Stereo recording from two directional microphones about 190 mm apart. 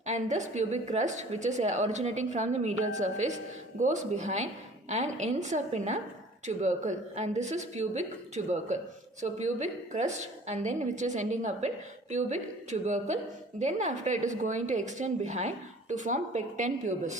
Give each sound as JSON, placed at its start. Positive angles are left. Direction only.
{"t": 0.0, "sound": "a woman's voice", "side_deg": -40}